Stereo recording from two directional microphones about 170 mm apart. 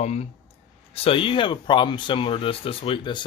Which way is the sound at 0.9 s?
35° left (ahead or behind).